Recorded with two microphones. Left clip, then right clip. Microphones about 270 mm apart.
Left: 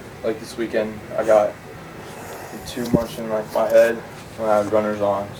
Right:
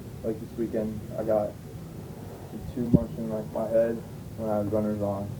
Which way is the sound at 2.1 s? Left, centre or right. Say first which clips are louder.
Left 10 dB; centre.